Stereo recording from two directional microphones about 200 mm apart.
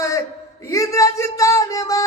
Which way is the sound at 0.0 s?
15° left (ahead or behind).